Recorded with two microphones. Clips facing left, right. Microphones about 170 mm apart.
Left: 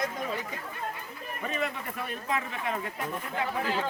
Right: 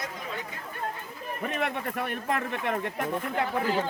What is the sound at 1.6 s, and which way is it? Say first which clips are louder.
Speech: right 3 dB; 65° right (ahead or behind).